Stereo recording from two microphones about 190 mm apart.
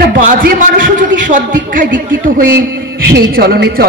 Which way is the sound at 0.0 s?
50° right (ahead or behind).